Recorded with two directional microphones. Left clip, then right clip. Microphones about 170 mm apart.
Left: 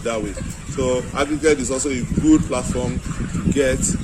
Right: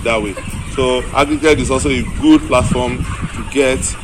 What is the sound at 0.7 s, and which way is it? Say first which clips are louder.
A man's voice: right 7 dB; 30° left (ahead or behind).